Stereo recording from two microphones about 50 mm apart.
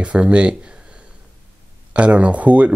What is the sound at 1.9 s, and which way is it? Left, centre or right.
Speech, right.